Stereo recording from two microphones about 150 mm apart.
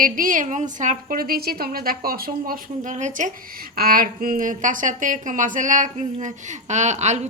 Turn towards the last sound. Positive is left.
turn(degrees=-50)  # may be behind; listen again after turning